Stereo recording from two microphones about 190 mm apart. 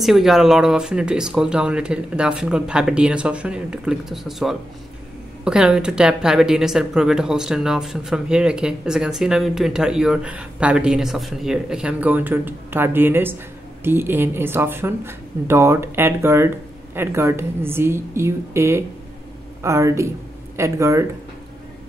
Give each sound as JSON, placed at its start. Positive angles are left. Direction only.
{"t": 0.0, "sound": "speech", "side_deg": 0}